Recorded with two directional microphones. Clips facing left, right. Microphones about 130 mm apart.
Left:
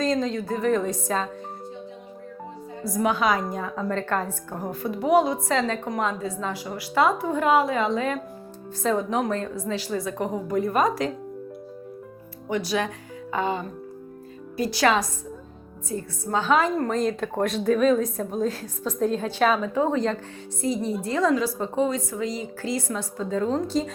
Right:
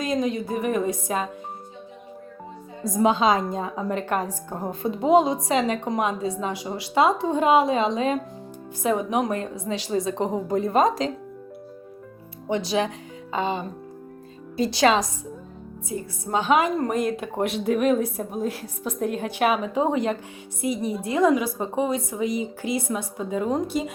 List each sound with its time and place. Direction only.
0.0 s a woman's voice: 15° right (ahead or behind)
2.8 s a woman's voice: 20° right (ahead or behind)
12.5 s a woman's voice: 25° right (ahead or behind)